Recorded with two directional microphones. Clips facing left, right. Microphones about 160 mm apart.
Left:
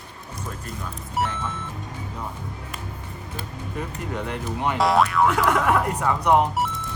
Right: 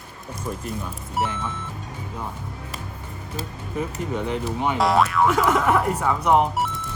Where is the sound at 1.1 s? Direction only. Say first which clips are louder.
Even; centre (ahead or behind).